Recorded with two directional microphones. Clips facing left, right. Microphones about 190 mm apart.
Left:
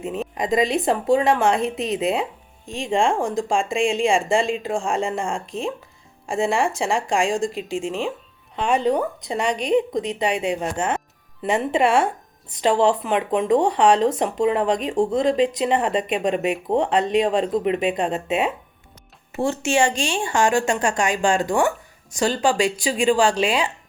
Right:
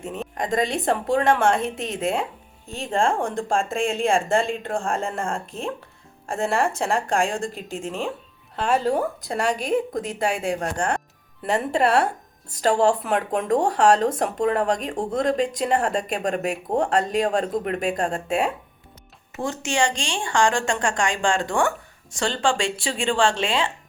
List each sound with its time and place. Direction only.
0.0 s speech: centre (ahead or behind)
19.3 s a woman's voice: 25° left (ahead or behind)
23.0 s speech: centre (ahead or behind)